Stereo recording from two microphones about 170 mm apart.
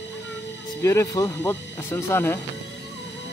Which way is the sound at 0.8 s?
20° left (ahead or behind).